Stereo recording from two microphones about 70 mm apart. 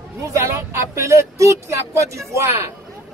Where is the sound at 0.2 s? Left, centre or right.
Right.